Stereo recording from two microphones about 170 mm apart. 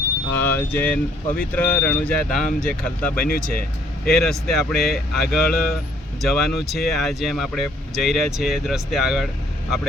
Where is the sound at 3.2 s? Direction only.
60° left (ahead or behind).